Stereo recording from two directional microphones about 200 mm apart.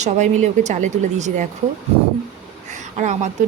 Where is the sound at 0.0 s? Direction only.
35° right (ahead or behind).